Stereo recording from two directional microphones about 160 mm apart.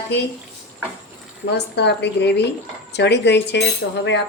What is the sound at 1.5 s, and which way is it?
A woman's voice, 90° left.